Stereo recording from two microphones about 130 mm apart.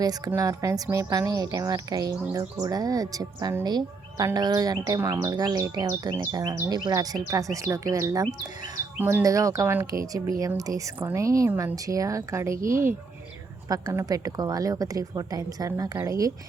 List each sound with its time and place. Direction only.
0.3 s a woman's voice: 25° right (ahead or behind)
9.0 s speech: 15° right (ahead or behind)